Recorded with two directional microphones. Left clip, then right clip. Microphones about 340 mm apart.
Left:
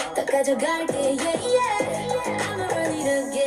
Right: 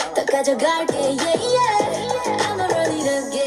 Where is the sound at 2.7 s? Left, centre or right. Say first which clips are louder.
Right 4 dB; right.